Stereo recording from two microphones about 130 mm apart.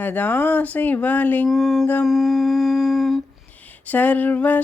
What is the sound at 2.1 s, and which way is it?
Humming, centre (ahead or behind).